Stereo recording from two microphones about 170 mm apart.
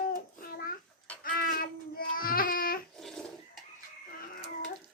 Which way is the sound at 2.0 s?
55° left (ahead or behind).